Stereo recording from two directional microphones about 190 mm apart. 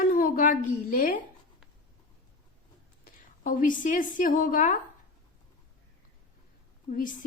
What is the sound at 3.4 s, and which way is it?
Speech, 45° left (ahead or behind).